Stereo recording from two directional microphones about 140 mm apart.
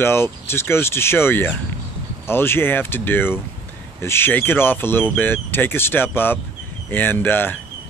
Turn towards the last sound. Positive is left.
turn(degrees=15)  # may be behind; listen again after turning